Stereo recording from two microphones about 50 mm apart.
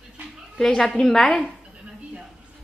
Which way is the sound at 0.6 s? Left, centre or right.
Centre.